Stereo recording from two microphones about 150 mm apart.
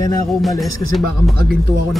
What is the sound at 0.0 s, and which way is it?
Speech, 25° left (ahead or behind).